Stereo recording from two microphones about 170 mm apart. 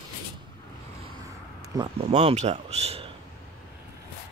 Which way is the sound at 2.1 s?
40° right (ahead or behind).